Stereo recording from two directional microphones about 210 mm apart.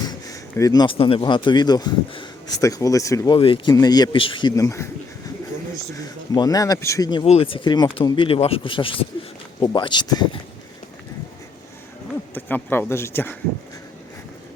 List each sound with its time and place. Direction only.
0.0 s speech: 15° left (ahead or behind)
6.3 s speech: 20° left (ahead or behind)
12.3 s speech: 10° left (ahead or behind)